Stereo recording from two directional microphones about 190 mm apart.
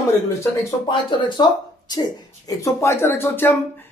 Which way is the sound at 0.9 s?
25° left (ahead or behind).